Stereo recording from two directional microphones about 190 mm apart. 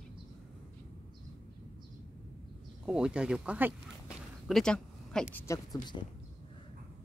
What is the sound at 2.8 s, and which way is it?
Speech, 5° right (ahead or behind).